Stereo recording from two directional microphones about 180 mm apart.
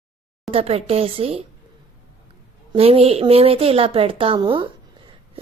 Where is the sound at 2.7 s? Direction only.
35° right (ahead or behind).